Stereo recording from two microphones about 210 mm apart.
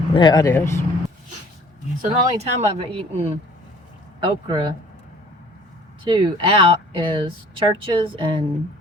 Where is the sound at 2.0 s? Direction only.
30° right (ahead or behind).